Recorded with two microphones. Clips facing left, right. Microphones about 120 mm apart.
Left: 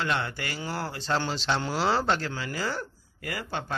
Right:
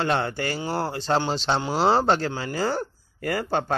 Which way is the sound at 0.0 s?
35° right (ahead or behind).